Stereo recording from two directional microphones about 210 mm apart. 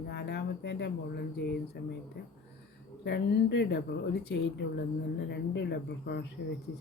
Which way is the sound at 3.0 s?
55° left (ahead or behind).